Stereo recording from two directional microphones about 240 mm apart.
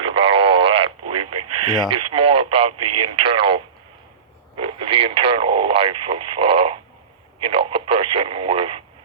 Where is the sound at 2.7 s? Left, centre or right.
Right.